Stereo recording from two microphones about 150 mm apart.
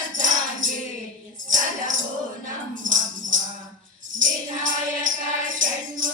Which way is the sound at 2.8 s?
60° right (ahead or behind).